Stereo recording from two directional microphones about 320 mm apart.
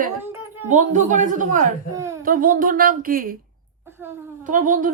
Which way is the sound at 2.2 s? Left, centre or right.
Right.